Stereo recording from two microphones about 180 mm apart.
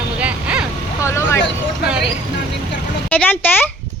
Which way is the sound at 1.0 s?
15° left (ahead or behind).